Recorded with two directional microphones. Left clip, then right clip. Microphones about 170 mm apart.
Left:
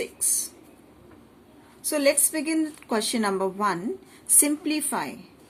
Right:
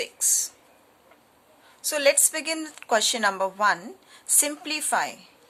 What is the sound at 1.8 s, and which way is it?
A woman's voice, 35° right (ahead or behind).